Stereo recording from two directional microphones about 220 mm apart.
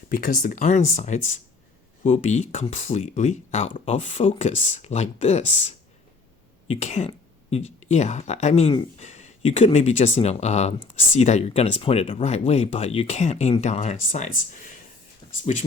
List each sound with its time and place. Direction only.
0.1 s speech: 35° left (ahead or behind)
6.7 s speech: 30° left (ahead or behind)